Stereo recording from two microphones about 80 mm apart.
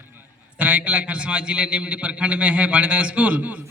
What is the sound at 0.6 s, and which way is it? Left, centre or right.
A man's voice, centre.